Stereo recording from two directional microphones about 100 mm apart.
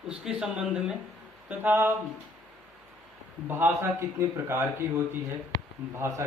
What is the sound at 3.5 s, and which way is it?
A man's voice, 20° right (ahead or behind).